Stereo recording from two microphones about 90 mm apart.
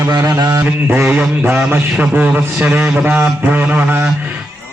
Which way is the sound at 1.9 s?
15° right (ahead or behind).